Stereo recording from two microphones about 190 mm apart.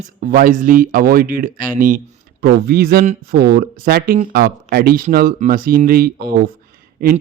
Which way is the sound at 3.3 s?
55° right (ahead or behind).